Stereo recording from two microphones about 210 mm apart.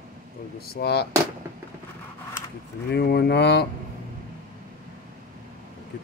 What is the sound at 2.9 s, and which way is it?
Speech, 50° left (ahead or behind).